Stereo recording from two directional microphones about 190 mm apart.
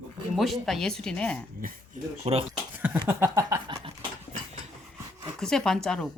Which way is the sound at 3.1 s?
10° right (ahead or behind).